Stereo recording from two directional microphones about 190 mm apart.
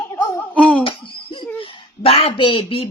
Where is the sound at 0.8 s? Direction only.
25° left (ahead or behind).